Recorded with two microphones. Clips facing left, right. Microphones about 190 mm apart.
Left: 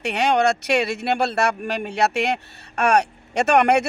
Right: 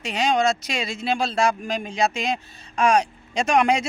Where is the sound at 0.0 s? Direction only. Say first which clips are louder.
Left 2 dB; 65° left (ahead or behind).